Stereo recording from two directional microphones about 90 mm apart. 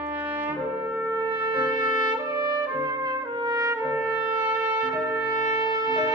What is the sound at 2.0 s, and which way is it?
Trumpet, 50° right (ahead or behind).